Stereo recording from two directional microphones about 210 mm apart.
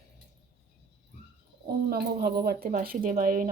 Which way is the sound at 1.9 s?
50° right (ahead or behind).